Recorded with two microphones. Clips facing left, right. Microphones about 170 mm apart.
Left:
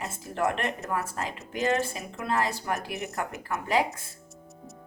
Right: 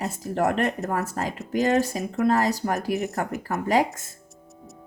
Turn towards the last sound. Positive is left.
turn(degrees=-40)  # may be behind; listen again after turning